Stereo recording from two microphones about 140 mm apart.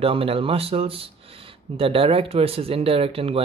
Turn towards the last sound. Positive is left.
turn(degrees=-40)  # may be behind; listen again after turning